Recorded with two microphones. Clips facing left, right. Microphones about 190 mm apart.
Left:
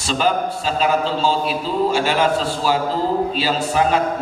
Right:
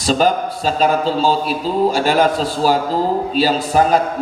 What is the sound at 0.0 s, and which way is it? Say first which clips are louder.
A man's voice: right 4 dB; 40° right (ahead or behind).